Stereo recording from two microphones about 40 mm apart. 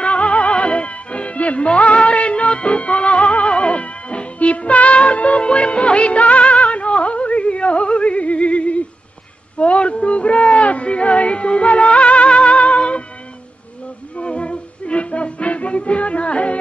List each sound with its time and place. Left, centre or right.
0.0 s music: left
9.6 s a sound: left
10.0 s music: left
14.1 s music: left